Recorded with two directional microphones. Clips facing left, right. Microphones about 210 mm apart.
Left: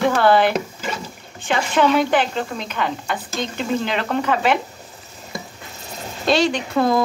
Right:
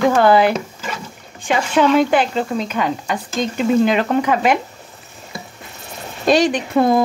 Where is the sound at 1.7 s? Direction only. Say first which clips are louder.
Right 3 dB; 5° right (ahead or behind).